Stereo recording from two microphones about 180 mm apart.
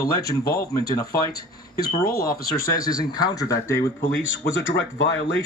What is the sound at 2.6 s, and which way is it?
Speech, 20° left (ahead or behind).